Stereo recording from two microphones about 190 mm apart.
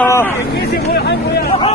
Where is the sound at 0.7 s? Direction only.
60° left (ahead or behind).